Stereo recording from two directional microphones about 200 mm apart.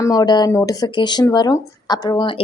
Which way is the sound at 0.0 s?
20° left (ahead or behind).